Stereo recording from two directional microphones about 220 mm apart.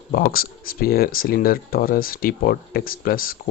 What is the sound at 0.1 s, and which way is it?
Speech, 40° left (ahead or behind).